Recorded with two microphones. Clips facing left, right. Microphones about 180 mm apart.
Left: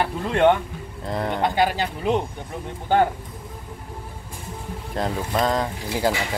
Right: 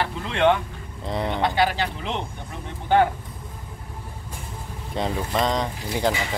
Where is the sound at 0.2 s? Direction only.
45° left (ahead or behind).